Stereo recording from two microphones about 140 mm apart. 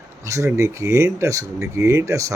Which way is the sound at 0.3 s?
20° right (ahead or behind).